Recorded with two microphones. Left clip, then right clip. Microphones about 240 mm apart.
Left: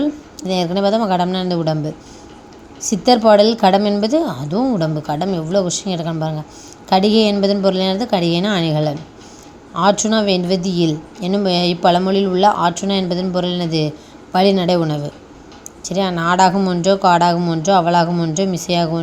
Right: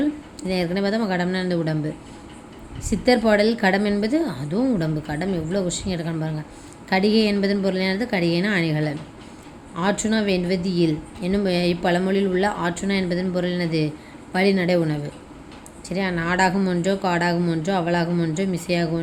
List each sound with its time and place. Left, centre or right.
0.0 s a woman's voice: centre
2.9 s a woman's voice: centre